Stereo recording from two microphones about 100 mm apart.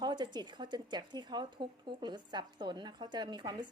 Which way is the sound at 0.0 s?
45° right (ahead or behind).